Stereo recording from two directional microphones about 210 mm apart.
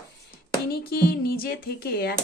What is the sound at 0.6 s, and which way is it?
Speech, 45° left (ahead or behind).